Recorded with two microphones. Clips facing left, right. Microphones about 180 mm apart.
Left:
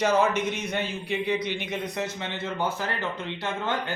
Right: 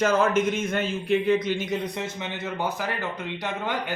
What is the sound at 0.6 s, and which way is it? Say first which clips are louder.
A man's voice: right 3 dB; 50° right (ahead or behind).